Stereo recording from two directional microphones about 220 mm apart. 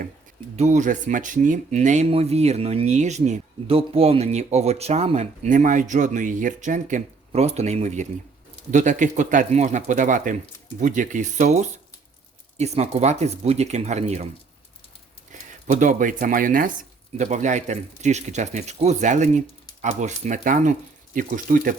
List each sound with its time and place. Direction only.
0.5 s speech: 30° right (ahead or behind)
15.3 s speech: 35° right (ahead or behind)